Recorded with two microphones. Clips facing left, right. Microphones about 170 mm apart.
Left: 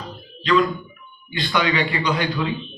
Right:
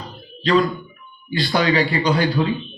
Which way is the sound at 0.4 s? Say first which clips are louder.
Right 1 dB; 35° right (ahead or behind).